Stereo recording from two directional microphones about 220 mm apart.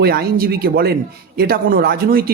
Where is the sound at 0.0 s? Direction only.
45° right (ahead or behind).